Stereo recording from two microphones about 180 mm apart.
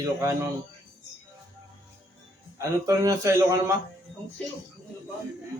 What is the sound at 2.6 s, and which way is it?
Speech, 20° right (ahead or behind).